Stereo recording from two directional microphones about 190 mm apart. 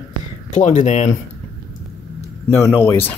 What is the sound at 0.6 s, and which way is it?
Speech, 40° left (ahead or behind).